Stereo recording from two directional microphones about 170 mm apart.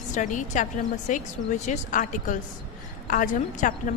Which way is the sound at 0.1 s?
50° left (ahead or behind).